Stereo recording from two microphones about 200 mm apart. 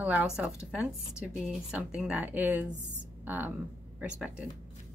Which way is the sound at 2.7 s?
35° right (ahead or behind).